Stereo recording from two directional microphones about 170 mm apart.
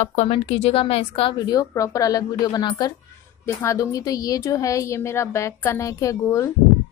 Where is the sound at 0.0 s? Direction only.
40° left (ahead or behind).